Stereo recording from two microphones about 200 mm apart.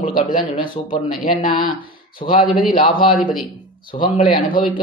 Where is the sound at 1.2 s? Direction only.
45° left (ahead or behind).